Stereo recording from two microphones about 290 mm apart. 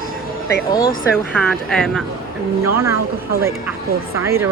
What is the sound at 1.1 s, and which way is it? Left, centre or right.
Speech, centre.